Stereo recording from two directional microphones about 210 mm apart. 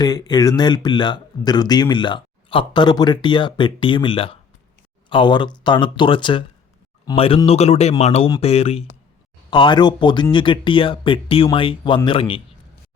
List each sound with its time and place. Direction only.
0.0 s speech: 20° left (ahead or behind)